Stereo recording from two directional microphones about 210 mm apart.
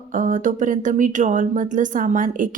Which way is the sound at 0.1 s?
40° right (ahead or behind).